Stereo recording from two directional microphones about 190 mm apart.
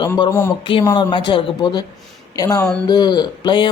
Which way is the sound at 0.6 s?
25° left (ahead or behind).